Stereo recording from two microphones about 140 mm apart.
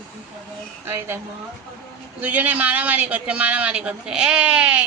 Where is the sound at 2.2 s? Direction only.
10° right (ahead or behind).